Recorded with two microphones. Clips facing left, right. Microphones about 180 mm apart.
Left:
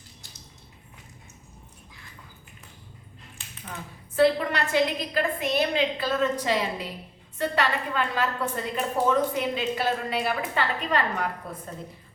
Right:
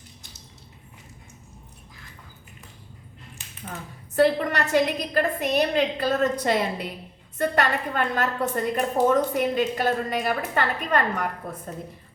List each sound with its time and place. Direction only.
4.1 s a woman's voice: 45° right (ahead or behind)